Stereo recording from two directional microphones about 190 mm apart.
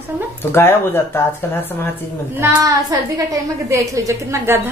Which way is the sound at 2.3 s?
15° right (ahead or behind).